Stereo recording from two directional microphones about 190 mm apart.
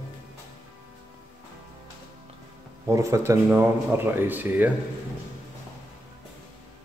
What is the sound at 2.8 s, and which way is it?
Speech, 15° right (ahead or behind).